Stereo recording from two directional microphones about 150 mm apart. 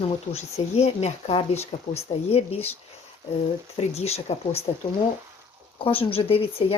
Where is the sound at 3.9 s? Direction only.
45° left (ahead or behind).